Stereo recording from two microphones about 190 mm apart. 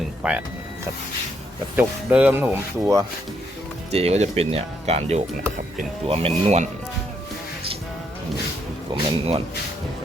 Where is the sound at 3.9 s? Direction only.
35° right (ahead or behind).